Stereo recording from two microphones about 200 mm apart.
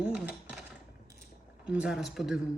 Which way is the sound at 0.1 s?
5° right (ahead or behind).